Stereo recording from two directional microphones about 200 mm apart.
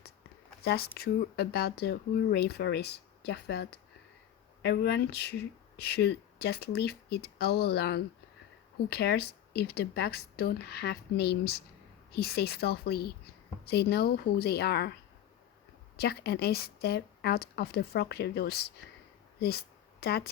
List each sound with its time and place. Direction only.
0.6 s speech: 55° left (ahead or behind)
16.0 s speech: 50° left (ahead or behind)
19.4 s a sound: 50° left (ahead or behind)